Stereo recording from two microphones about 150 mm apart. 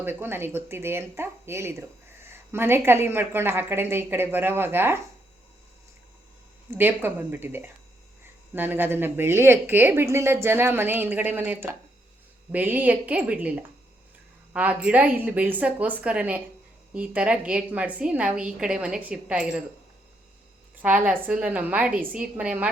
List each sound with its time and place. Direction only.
0.0 s speech: 15° right (ahead or behind)
6.7 s speech: 15° right (ahead or behind)
20.8 s speech: 10° right (ahead or behind)